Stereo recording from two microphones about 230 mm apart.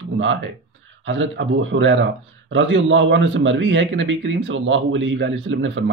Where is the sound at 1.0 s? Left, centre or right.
Right.